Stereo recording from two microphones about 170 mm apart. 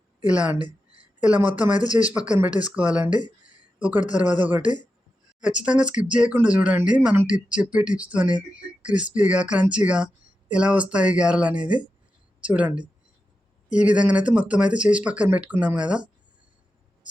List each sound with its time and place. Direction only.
0.3 s speech: 10° right (ahead or behind)
1.8 s speech: 20° left (ahead or behind)
2.0 s a man's voice: 5° right (ahead or behind)